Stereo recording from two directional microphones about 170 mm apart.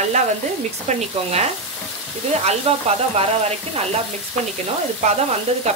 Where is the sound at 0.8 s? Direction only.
40° right (ahead or behind).